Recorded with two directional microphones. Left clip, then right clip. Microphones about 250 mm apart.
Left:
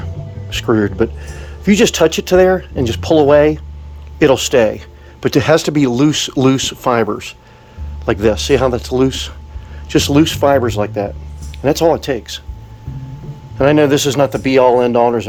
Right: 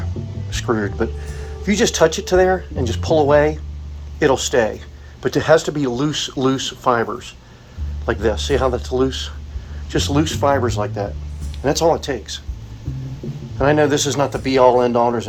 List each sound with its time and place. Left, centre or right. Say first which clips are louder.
0.5 s speech: left 6 dB; left
13.6 s speech: left 4 dB; left